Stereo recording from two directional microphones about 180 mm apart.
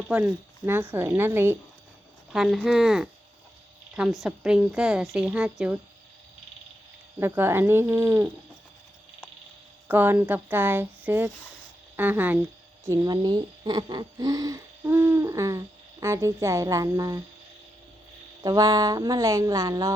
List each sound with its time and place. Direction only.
0.1 s speech: 10° right (ahead or behind)
2.3 s a woman's voice: centre (ahead or behind)
7.2 s speech: 15° right (ahead or behind)
9.9 s speech: 10° right (ahead or behind)
18.4 s speech: 20° right (ahead or behind)